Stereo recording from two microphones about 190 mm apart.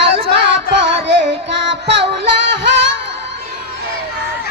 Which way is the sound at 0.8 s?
70° right (ahead or behind).